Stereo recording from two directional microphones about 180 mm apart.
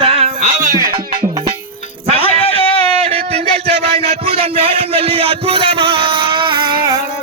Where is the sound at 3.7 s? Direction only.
35° right (ahead or behind).